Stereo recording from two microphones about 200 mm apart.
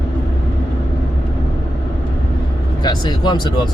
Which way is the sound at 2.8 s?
20° left (ahead or behind).